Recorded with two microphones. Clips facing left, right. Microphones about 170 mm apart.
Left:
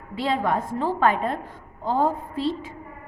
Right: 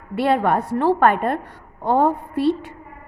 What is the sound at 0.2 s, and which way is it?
A woman's voice, 65° right (ahead or behind).